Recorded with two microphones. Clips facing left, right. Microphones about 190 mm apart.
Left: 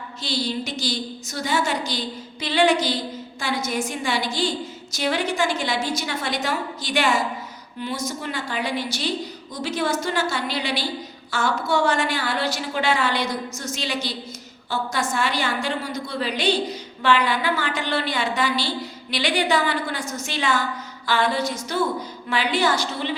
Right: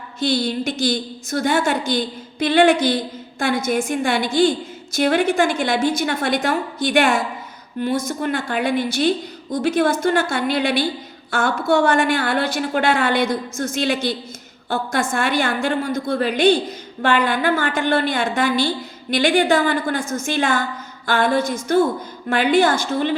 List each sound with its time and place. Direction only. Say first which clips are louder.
0.2 s a woman's voice: right 6 dB; 55° right (ahead or behind)